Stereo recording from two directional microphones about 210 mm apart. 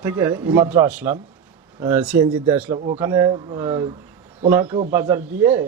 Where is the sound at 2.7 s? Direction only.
25° right (ahead or behind).